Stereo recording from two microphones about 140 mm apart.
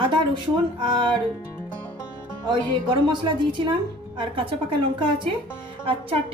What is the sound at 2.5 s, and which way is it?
Speech, 35° right (ahead or behind).